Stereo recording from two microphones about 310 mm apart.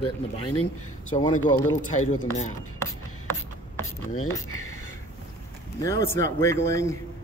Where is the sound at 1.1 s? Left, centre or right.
Centre.